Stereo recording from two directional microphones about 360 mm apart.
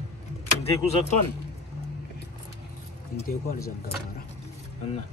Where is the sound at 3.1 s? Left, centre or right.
Left.